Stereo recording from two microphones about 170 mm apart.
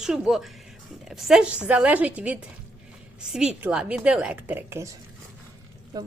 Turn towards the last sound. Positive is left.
turn(degrees=-20)  # may be behind; listen again after turning